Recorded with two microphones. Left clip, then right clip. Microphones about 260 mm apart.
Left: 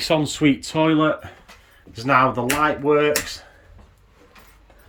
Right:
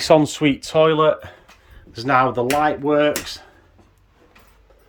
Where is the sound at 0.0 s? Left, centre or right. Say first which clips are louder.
Right 4 dB; centre.